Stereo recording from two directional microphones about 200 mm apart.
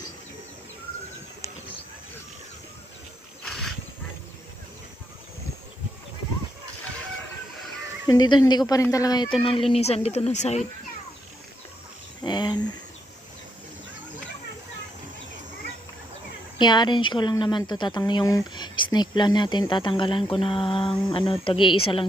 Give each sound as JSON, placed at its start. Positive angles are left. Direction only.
{"t": 8.0, "sound": "speech", "side_deg": 20}
{"t": 12.2, "sound": "a sound", "side_deg": 20}
{"t": 16.6, "sound": "speech", "side_deg": 20}